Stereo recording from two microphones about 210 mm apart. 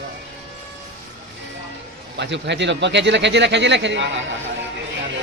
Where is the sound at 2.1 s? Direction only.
55° right (ahead or behind).